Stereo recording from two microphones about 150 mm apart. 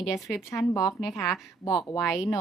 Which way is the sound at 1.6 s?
25° left (ahead or behind).